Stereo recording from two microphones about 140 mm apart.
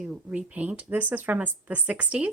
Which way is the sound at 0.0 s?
10° right (ahead or behind).